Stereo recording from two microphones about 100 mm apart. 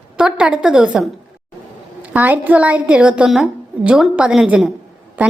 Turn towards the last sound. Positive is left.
turn(degrees=-15)  # may be behind; listen again after turning